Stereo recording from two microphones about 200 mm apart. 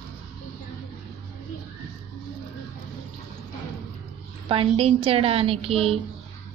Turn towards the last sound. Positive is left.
turn(degrees=-30)  # may be behind; listen again after turning